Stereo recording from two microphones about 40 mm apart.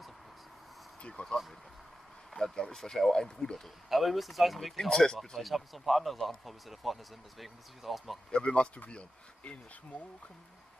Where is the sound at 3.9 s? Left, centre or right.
Centre.